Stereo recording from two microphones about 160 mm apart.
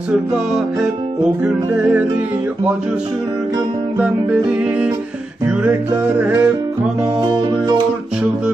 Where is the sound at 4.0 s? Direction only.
10° right (ahead or behind).